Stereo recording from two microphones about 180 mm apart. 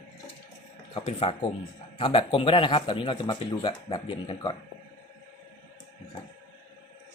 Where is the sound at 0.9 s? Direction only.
35° left (ahead or behind).